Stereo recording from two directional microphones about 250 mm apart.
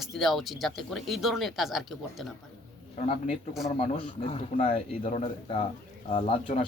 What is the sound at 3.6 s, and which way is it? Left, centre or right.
A man's voice, left.